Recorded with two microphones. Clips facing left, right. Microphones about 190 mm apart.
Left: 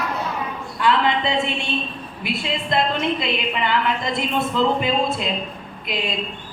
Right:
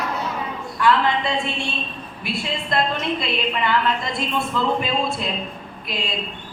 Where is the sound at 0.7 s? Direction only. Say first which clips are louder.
Even; 20° left (ahead or behind).